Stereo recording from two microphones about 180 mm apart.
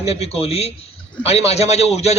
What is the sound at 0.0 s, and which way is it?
A man's voice, 35° left (ahead or behind).